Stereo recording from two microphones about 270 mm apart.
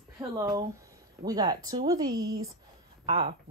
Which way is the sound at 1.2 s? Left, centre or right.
Centre.